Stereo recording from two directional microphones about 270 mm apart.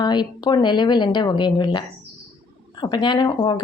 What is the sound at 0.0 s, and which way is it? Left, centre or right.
A woman's voice, centre.